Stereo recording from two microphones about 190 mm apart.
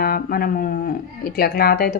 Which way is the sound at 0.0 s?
50° left (ahead or behind).